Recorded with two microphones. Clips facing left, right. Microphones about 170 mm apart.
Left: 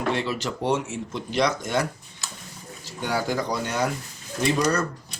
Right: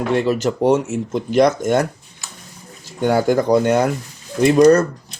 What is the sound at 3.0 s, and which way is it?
Speech, 50° right (ahead or behind).